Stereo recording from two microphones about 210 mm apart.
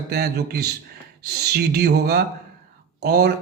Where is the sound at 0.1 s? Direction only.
50° right (ahead or behind).